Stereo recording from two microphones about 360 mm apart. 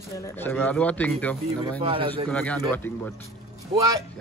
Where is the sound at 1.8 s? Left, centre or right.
Centre.